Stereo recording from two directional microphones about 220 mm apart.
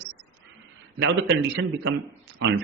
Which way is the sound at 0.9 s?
55° right (ahead or behind).